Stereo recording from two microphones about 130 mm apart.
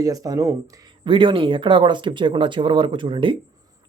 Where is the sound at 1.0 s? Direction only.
40° right (ahead or behind).